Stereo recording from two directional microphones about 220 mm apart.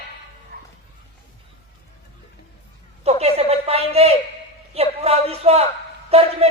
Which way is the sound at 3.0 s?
30° right (ahead or behind).